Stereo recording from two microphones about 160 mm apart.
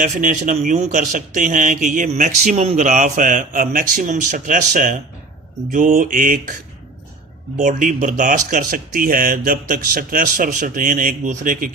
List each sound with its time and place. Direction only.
0.0 s speech: 55° right (ahead or behind)